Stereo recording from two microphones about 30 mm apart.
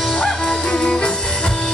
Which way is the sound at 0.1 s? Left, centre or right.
Centre.